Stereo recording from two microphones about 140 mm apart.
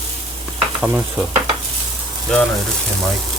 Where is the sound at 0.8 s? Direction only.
5° right (ahead or behind).